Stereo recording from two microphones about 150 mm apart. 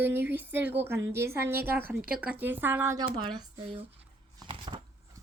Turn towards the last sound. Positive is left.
turn(degrees=-30)  # may be behind; listen again after turning